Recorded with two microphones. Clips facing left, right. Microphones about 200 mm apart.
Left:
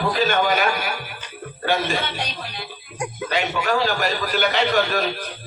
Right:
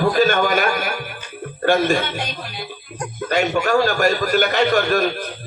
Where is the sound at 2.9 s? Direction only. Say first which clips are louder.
Even; 10° left (ahead or behind).